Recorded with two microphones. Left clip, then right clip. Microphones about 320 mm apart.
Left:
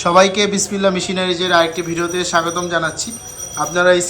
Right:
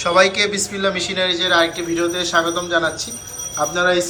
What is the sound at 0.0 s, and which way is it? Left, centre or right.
A man's voice, centre.